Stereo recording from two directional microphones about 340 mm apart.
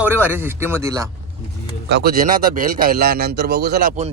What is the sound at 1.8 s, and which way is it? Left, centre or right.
A man's voice, right.